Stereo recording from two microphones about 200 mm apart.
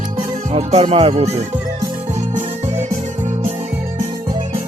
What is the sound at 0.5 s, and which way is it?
Music, 30° right (ahead or behind).